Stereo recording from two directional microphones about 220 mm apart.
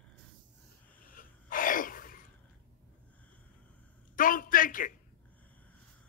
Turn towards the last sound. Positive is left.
turn(degrees=40)  # may be behind; listen again after turning